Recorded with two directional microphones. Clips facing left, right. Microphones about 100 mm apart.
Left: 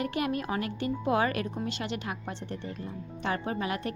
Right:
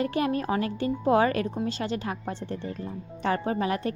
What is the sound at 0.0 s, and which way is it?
A woman's voice, 30° right (ahead or behind).